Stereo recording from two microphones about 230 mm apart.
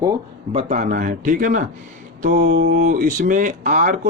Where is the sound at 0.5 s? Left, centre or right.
Right.